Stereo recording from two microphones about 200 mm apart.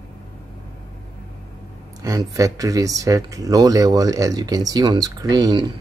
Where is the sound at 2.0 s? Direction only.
15° right (ahead or behind).